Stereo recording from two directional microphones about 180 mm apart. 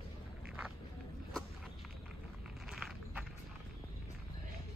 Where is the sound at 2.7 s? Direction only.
Centre (ahead or behind).